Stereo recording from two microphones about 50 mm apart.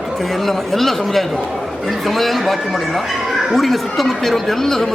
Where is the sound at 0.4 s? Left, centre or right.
Centre.